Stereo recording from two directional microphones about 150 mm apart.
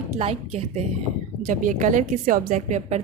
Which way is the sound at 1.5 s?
60° right (ahead or behind).